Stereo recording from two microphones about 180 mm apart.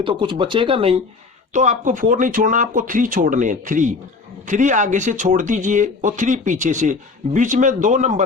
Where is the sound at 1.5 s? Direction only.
45° right (ahead or behind).